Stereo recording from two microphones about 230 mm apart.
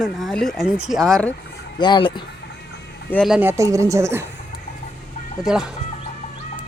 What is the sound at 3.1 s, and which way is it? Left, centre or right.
Speech, centre.